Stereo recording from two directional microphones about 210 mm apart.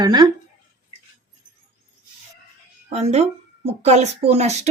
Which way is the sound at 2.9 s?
30° right (ahead or behind).